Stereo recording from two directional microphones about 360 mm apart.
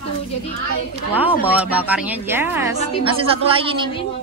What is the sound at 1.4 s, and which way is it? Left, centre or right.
A woman's voice, centre.